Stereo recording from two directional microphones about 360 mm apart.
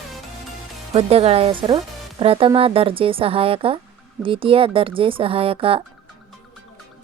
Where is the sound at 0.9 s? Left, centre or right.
Centre.